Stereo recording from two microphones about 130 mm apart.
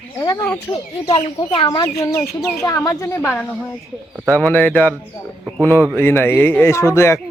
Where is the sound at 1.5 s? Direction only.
40° left (ahead or behind).